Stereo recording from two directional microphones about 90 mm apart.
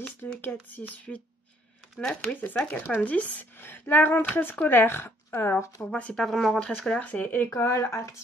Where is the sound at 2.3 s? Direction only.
20° left (ahead or behind).